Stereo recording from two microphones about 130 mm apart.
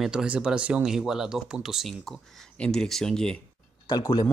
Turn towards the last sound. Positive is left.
turn(degrees=30)  # may be behind; listen again after turning